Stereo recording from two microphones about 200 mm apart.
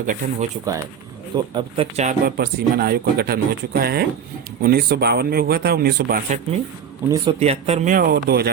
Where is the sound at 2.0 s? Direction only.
40° right (ahead or behind).